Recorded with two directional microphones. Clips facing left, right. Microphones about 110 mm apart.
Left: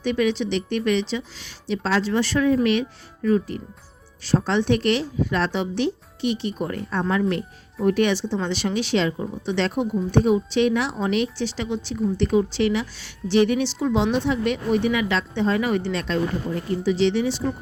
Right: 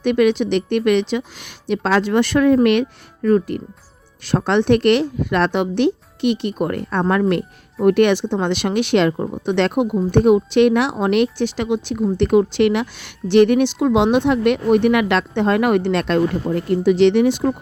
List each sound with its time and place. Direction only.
0.0 s speech: 60° right (ahead or behind)